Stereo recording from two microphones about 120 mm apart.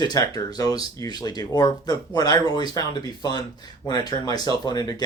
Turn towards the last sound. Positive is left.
turn(degrees=35)  # may be behind; listen again after turning